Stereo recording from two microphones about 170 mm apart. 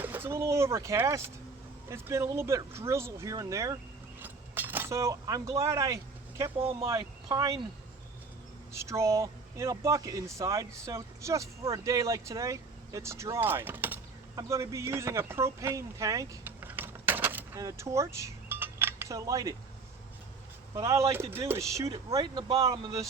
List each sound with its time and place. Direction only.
0.0 s speech: 10° right (ahead or behind)
4.2 s keys jangling: 10° right (ahead or behind)
6.6 s speech: 30° right (ahead or behind)
6.8 s speech: 20° right (ahead or behind)
8.7 s speech: 15° right (ahead or behind)
20.7 s speech: 20° right (ahead or behind)